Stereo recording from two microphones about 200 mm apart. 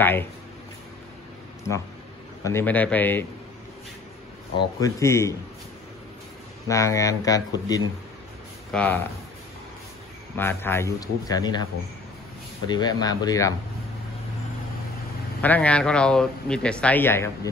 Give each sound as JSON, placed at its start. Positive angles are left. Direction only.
{"t": 0.0, "sound": "speech", "side_deg": 10}
{"t": 2.4, "sound": "speech", "side_deg": 10}
{"t": 4.6, "sound": "speech", "side_deg": 15}
{"t": 6.7, "sound": "speech", "side_deg": 15}
{"t": 10.3, "sound": "speech", "side_deg": 10}
{"t": 12.6, "sound": "speech", "side_deg": 20}
{"t": 15.4, "sound": "speech", "side_deg": 5}